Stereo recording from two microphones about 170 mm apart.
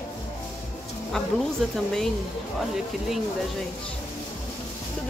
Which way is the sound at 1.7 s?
Centre (ahead or behind).